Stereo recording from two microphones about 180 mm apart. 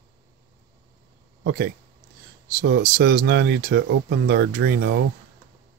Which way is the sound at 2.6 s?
60° right (ahead or behind).